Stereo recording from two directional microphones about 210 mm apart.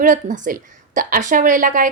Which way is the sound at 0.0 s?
40° right (ahead or behind).